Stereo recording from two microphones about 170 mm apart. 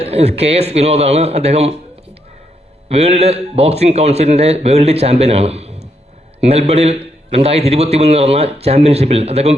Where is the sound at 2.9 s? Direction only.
35° right (ahead or behind).